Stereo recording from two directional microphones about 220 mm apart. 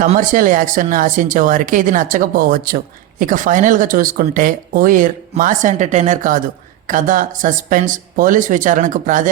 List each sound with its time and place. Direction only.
0.0 s speech: 35° right (ahead or behind)